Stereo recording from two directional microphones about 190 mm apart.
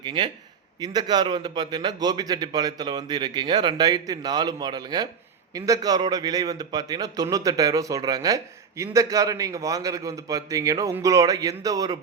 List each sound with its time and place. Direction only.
0.0 s a man's voice: 25° right (ahead or behind)